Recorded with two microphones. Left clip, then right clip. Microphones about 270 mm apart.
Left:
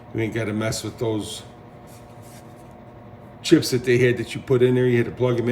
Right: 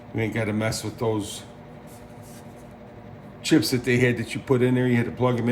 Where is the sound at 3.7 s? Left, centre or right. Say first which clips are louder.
Left 3 dB; right.